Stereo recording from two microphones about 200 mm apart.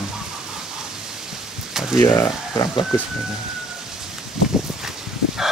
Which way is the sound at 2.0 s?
15° left (ahead or behind).